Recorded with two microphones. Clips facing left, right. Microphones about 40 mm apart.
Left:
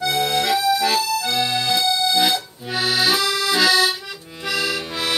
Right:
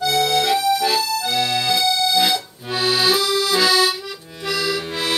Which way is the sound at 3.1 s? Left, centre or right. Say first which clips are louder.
Right 1 dB; left.